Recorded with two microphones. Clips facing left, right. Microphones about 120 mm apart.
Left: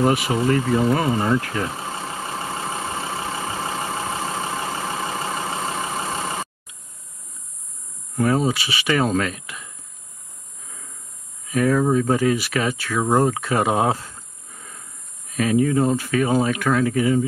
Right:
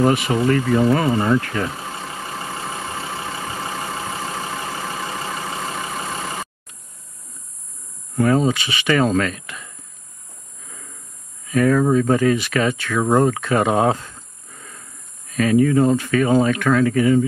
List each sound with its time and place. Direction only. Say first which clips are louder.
0.0 s speech: right 2 dB; 5° left (ahead or behind)
1.7 s vehicle: left 1 dB; 25° left (ahead or behind)
8.2 s speech: right 3 dB; 10° left (ahead or behind)
11.5 s speech: right 2 dB; 10° left (ahead or behind)
15.3 s speech: right 3 dB; 10° left (ahead or behind)